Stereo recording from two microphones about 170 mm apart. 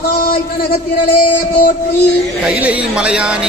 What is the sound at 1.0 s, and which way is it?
Music, 60° left (ahead or behind).